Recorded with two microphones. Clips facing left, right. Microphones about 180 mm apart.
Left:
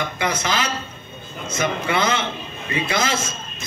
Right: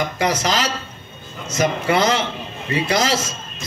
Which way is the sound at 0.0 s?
45° right (ahead or behind).